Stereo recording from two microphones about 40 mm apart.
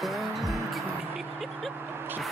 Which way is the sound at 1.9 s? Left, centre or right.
Right.